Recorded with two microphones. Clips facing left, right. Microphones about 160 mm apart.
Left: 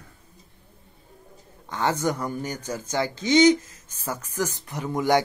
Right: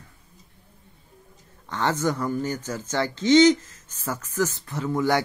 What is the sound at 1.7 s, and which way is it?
Speech, 15° left (ahead or behind).